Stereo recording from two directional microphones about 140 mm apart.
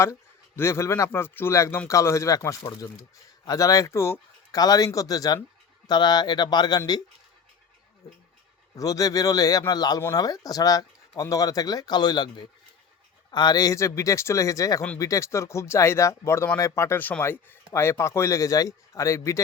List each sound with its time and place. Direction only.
0.0 s speech: 20° left (ahead or behind)
8.7 s speech: 25° left (ahead or behind)